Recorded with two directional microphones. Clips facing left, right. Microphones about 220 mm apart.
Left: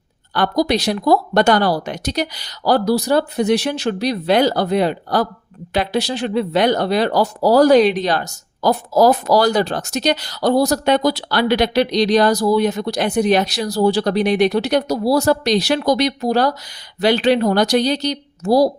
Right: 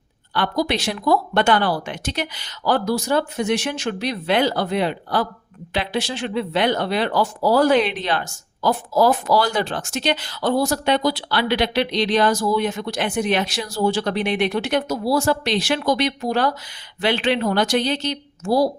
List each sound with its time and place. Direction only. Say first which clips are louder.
0.3 s speech: left 5 dB; 40° left (ahead or behind)